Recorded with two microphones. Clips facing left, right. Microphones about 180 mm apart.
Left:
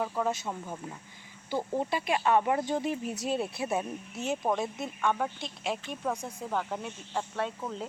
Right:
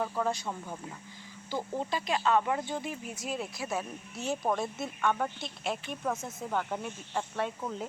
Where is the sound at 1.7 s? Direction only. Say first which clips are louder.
Left 2 dB; 25° left (ahead or behind).